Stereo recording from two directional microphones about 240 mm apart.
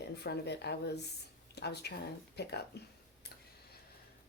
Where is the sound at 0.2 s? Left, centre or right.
Left.